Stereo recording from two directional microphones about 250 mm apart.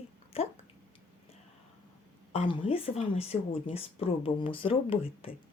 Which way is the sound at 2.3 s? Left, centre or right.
Centre.